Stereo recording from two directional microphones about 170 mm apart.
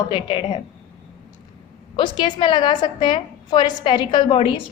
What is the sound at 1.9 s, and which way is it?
A woman's voice, 30° left (ahead or behind).